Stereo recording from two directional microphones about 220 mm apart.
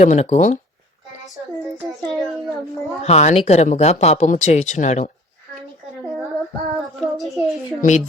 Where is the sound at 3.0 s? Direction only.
30° left (ahead or behind).